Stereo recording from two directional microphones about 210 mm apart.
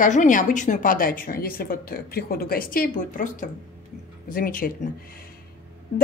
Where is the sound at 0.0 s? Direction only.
35° left (ahead or behind).